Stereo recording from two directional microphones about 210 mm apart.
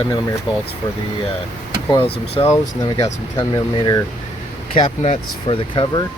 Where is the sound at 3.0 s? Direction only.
15° left (ahead or behind).